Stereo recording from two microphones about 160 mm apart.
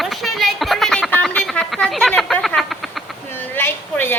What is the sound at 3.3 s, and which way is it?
Speech, 15° left (ahead or behind).